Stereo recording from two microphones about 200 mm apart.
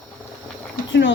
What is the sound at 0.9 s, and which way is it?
Speech, 65° left (ahead or behind).